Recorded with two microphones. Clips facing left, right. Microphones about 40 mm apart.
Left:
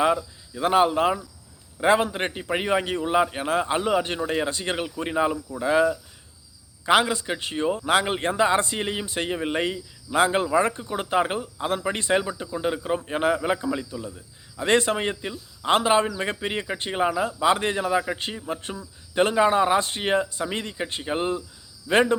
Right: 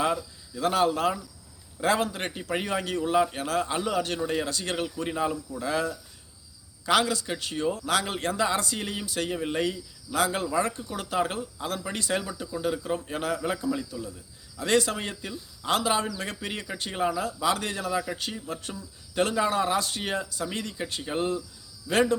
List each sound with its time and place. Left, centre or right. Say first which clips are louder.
0.0 s a man's voice: left 5 dB; left
21.9 s speech: left 5 dB; left